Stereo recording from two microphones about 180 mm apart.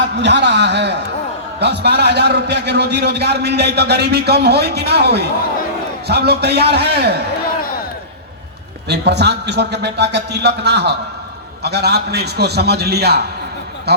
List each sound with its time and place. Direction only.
0.2 s a man's voice: 75° right (ahead or behind)
8.9 s a man's voice: 70° right (ahead or behind)